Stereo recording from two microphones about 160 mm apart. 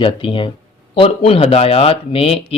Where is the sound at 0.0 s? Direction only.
30° left (ahead or behind).